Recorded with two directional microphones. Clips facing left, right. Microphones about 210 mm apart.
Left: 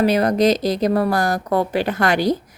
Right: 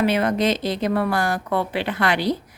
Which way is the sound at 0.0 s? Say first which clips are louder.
Left 4 dB; 40° left (ahead or behind).